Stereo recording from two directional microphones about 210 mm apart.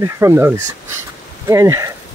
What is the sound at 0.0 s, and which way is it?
Speech, 15° right (ahead or behind).